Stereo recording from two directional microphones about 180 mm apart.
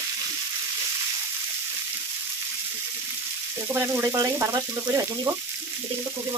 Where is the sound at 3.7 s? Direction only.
10° right (ahead or behind).